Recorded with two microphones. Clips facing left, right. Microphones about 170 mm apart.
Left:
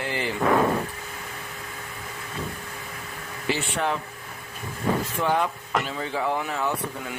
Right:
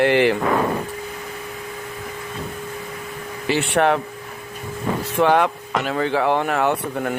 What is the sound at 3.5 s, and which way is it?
Speech, 70° right (ahead or behind).